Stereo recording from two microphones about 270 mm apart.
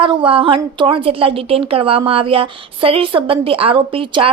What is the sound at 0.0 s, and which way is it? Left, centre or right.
A woman's voice, centre.